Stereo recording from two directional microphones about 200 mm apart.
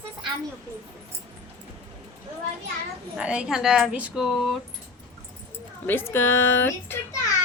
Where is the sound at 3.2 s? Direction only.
5° right (ahead or behind).